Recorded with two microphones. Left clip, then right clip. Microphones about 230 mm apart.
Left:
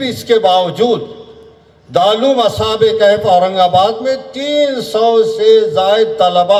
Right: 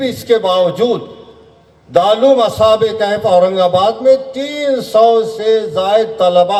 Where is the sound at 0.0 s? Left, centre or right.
Left.